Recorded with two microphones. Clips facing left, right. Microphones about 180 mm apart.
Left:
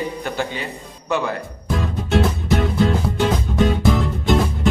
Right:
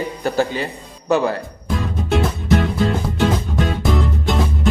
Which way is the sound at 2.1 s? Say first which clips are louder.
Right 1 dB; centre (ahead or behind).